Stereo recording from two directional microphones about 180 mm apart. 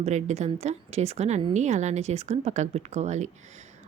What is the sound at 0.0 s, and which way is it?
A woman's voice, 40° right (ahead or behind).